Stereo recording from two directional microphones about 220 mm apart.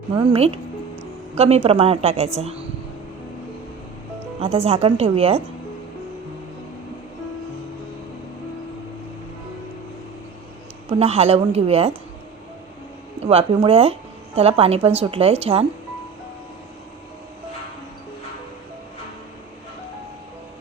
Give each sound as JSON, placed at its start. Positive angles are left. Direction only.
{"t": 0.2, "sound": "a woman's voice", "side_deg": -25}
{"t": 4.4, "sound": "a woman's voice", "side_deg": -25}
{"t": 11.0, "sound": "a woman's voice", "side_deg": -30}
{"t": 13.2, "sound": "a woman's voice", "side_deg": -25}